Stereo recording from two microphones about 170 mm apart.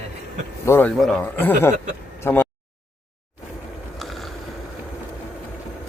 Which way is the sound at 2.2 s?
10° left (ahead or behind).